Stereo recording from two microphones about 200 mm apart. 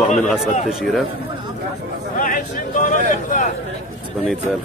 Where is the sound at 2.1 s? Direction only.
45° left (ahead or behind).